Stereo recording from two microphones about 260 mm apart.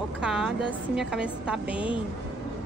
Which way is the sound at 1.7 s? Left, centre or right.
Centre.